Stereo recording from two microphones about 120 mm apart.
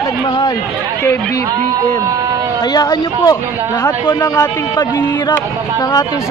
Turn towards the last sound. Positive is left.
turn(degrees=35)  # may be behind; listen again after turning